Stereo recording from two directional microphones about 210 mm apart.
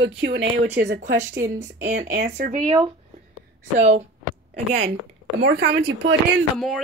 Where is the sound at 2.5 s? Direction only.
20° right (ahead or behind).